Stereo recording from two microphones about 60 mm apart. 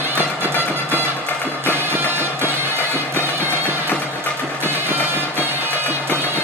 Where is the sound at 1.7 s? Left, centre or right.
Right.